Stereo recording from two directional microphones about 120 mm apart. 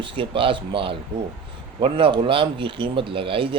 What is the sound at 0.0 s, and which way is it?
Speech, 45° right (ahead or behind).